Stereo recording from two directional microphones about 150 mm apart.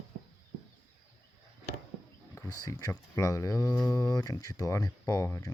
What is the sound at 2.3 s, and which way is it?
Speech, 20° left (ahead or behind).